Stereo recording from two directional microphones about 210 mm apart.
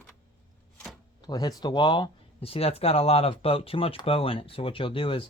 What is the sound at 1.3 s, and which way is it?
Speech, 20° left (ahead or behind).